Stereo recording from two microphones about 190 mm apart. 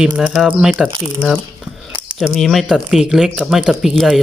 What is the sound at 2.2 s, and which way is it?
A woman's voice, centre (ahead or behind).